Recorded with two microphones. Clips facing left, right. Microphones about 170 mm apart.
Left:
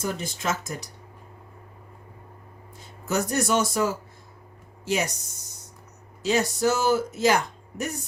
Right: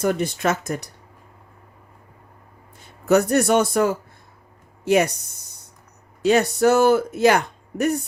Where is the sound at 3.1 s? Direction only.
65° right (ahead or behind).